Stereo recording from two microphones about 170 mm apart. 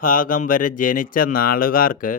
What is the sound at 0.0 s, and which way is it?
Speech, 55° left (ahead or behind).